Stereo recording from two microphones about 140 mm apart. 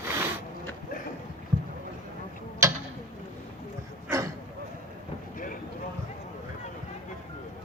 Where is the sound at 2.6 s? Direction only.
20° right (ahead or behind).